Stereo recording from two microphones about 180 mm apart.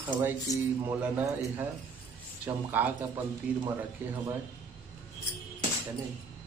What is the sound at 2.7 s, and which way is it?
Speech, 10° right (ahead or behind).